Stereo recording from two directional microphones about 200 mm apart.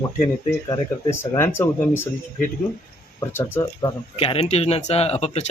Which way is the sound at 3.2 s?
10° left (ahead or behind).